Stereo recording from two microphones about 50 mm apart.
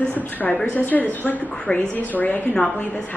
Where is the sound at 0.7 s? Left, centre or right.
Left.